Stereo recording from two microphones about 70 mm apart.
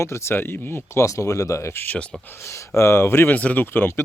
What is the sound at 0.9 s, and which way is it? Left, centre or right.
Speech, left.